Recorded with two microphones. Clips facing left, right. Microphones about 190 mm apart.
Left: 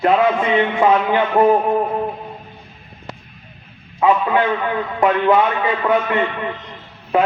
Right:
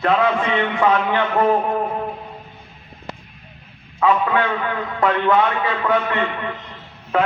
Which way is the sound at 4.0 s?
25° left (ahead or behind).